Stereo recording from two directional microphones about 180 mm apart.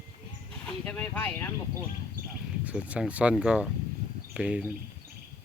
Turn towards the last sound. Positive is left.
turn(degrees=-5)  # may be behind; listen again after turning